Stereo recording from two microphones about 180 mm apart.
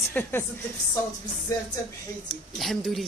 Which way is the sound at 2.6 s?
Centre (ahead or behind).